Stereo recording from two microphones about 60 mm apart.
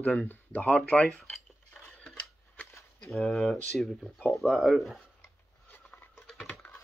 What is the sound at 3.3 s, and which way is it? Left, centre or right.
Speech, centre.